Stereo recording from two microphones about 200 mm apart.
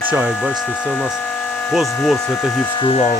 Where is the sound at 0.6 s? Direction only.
10° left (ahead or behind).